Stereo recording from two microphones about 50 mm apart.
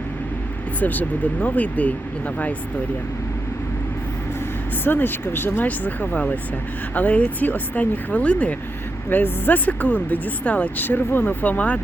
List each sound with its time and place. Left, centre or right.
0.8 s speech: left
4.8 s speech: left
9.0 s speech: left
10.8 s speech: left